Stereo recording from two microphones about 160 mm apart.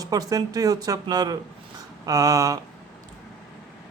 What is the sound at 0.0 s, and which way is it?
Speech, 25° right (ahead or behind).